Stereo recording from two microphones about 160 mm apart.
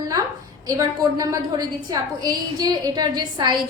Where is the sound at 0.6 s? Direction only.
20° right (ahead or behind).